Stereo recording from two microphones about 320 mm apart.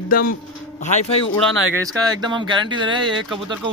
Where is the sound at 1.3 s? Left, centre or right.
Centre.